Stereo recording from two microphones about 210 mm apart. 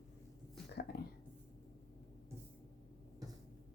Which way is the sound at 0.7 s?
50° left (ahead or behind).